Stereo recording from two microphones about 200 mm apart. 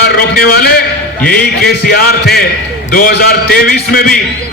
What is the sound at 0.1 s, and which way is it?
A man's voice, 50° left (ahead or behind).